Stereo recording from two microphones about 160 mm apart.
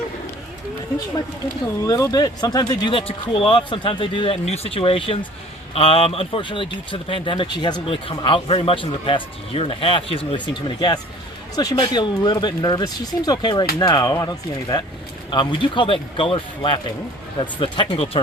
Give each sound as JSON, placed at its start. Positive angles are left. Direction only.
{"t": 1.9, "sound": "speech", "side_deg": 25}